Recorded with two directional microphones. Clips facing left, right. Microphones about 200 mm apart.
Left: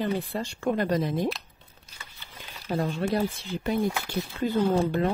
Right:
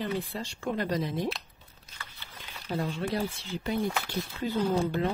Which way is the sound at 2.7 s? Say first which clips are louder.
Left 4 dB; 50° left (ahead or behind).